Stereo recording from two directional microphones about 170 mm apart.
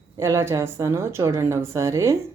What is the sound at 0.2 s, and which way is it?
A woman's voice, 15° right (ahead or behind).